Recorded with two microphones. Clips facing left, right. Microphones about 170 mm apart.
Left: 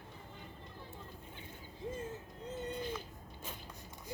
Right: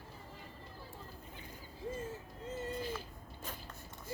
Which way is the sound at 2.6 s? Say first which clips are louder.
Even; 5° right (ahead or behind).